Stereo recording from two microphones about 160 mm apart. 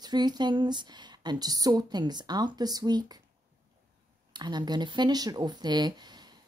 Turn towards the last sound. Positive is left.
turn(degrees=-25)  # may be behind; listen again after turning